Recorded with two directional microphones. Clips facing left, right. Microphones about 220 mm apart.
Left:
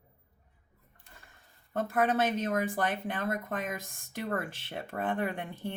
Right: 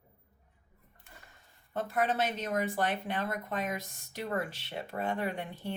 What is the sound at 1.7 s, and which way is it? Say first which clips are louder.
Speech: left 3 dB; 50° left (ahead or behind).